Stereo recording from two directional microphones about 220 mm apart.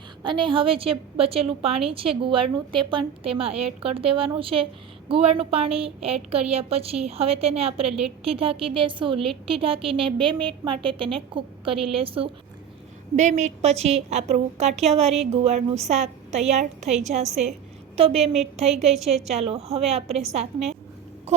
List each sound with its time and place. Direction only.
0.2 s a woman's voice: 20° right (ahead or behind)
18.7 s a woman's voice: centre (ahead or behind)
19.3 s a woman's voice: 30° right (ahead or behind)
21.3 s a sound: 30° right (ahead or behind)